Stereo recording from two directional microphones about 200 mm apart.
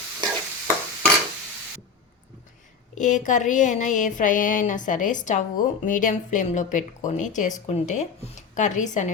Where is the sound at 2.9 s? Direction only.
40° left (ahead or behind).